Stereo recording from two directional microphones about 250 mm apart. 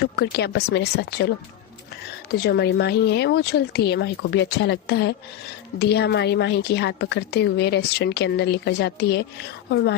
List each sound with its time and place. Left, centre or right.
0.0 s a woman's voice: left
2.4 s a woman's voice: left